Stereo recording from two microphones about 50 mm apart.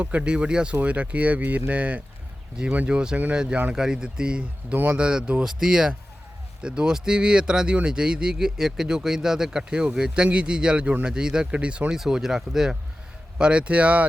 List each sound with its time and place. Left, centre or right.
0.0 s speech: right
4.7 s speech: right
4.9 s speech: right
11.9 s speech: centre
13.4 s speech: right